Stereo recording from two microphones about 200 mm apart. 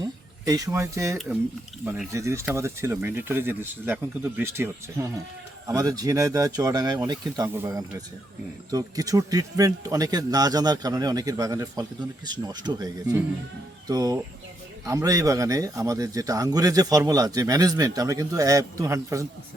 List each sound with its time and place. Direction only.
0.0 s a man's voice: 20° right (ahead or behind)